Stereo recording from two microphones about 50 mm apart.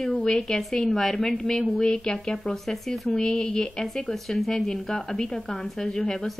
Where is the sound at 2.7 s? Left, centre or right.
Centre.